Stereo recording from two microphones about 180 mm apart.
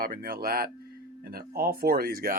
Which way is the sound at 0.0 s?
55° right (ahead or behind).